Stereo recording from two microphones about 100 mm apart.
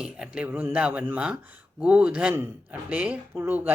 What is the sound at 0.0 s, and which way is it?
Speech, 10° right (ahead or behind).